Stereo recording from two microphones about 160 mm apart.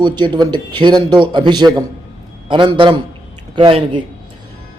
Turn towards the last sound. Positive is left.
turn(degrees=-30)  # may be behind; listen again after turning